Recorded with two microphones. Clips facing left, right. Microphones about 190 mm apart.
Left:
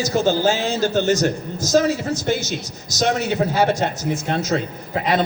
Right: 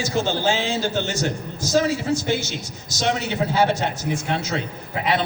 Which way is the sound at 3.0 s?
40° left (ahead or behind).